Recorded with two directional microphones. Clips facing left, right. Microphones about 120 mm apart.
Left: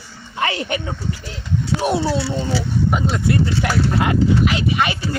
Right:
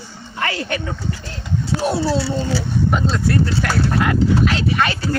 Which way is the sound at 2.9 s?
10° left (ahead or behind).